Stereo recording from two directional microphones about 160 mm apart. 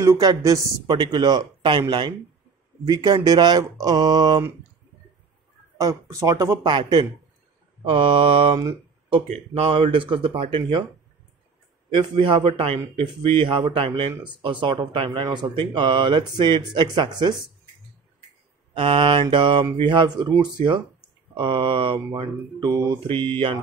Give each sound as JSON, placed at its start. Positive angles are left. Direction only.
{"t": 0.0, "sound": "speech", "side_deg": -20}
{"t": 5.8, "sound": "speech", "side_deg": -20}
{"t": 11.9, "sound": "speech", "side_deg": -30}
{"t": 18.7, "sound": "speech", "side_deg": -35}